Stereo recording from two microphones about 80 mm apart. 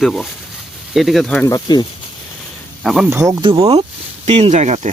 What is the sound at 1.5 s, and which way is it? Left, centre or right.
Speech, left.